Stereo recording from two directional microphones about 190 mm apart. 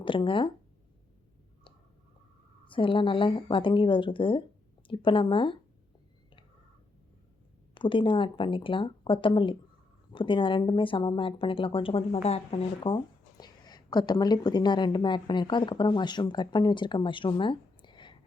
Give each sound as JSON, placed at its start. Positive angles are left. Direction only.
{"t": 0.0, "sound": "speech", "side_deg": 25}
{"t": 2.6, "sound": "speech", "side_deg": 25}
{"t": 7.7, "sound": "speech", "side_deg": 25}